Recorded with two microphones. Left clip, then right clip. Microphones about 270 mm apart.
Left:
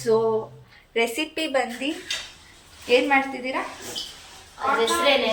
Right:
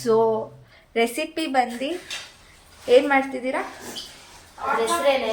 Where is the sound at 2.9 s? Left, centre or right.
Centre.